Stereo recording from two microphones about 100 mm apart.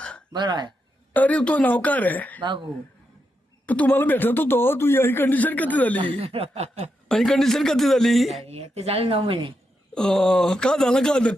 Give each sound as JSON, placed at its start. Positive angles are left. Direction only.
{"t": 0.0, "sound": "a sound", "side_deg": 10}
{"t": 0.3, "sound": "speech", "side_deg": -45}
{"t": 1.1, "sound": "speech", "side_deg": 15}
{"t": 2.4, "sound": "speech", "side_deg": -50}
{"t": 3.7, "sound": "a man's voice", "side_deg": 15}
{"t": 6.1, "sound": "chuckle", "side_deg": -85}
{"t": 7.1, "sound": "a man's voice", "side_deg": 5}
{"t": 8.4, "sound": "speech", "side_deg": -90}
{"t": 9.9, "sound": "speech", "side_deg": 5}